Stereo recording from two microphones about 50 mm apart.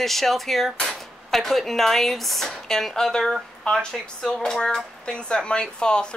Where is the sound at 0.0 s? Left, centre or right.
Centre.